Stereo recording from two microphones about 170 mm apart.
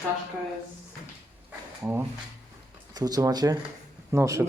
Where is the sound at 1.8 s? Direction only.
15° right (ahead or behind).